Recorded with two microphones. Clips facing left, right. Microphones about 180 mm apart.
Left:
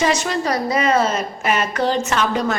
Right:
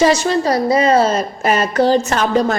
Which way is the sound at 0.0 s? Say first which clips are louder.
Right 6 dB; 30° right (ahead or behind).